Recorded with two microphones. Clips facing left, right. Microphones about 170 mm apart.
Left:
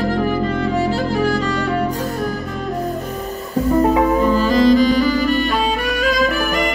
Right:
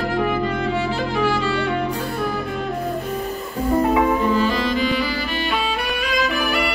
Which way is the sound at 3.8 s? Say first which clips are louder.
Left 3 dB; 40° left (ahead or behind).